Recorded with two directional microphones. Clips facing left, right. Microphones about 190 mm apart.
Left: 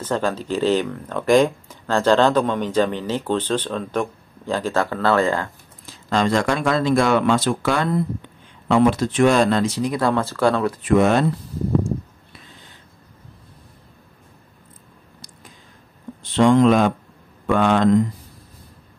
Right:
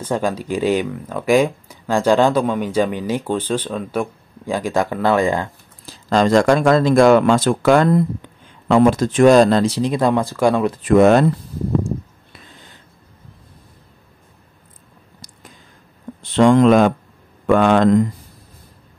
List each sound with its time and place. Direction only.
0.0 s speech: 10° right (ahead or behind)
5.9 s speech: 40° right (ahead or behind); by 10.7 s 15° right (ahead or behind)
10.9 s speech: 45° right (ahead or behind)
16.2 s speech: 50° right (ahead or behind)